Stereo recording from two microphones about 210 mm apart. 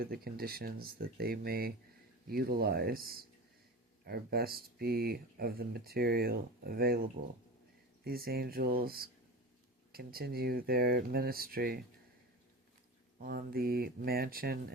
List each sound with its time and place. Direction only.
0.0 s speech: 45° right (ahead or behind)
13.1 s speech: 45° right (ahead or behind)